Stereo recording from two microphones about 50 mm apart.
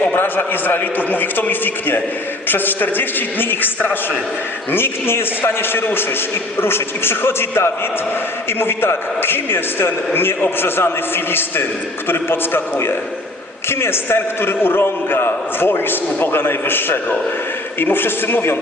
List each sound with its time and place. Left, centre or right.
0.2 s a man's voice: left
4.7 s a man's voice: left